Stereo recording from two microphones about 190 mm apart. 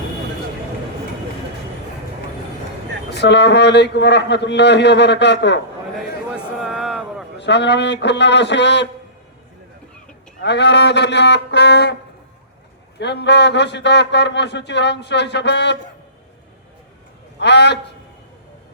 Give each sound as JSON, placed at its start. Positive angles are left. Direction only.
{"t": 3.1, "sound": "a man's voice", "side_deg": 65}
{"t": 6.3, "sound": "a sound", "side_deg": 0}
{"t": 7.3, "sound": "a man's voice", "side_deg": 65}
{"t": 10.4, "sound": "a man's voice", "side_deg": 65}
{"t": 13.0, "sound": "a man's voice", "side_deg": 65}
{"t": 17.4, "sound": "a man's voice", "side_deg": 65}